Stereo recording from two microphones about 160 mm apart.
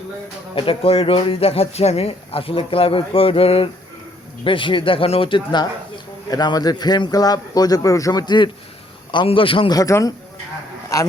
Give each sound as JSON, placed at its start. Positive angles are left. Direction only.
{"t": 0.5, "sound": "a man's voice", "side_deg": 35}